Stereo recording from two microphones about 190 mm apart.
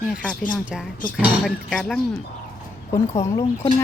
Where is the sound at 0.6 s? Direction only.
5° right (ahead or behind).